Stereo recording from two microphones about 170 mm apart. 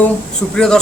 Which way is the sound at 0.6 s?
5° left (ahead or behind).